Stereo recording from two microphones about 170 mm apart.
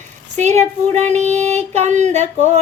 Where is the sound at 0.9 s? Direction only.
40° right (ahead or behind).